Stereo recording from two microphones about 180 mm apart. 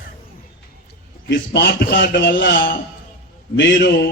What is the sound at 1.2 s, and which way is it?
A man's voice, 70° left (ahead or behind).